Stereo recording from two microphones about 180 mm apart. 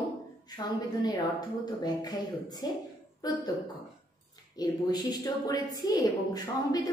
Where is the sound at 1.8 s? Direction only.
20° left (ahead or behind).